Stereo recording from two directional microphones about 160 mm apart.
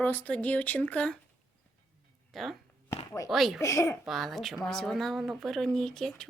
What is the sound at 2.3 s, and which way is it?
Speech, centre (ahead or behind).